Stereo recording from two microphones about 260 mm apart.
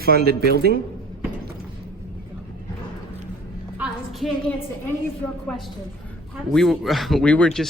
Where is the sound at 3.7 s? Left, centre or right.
Centre.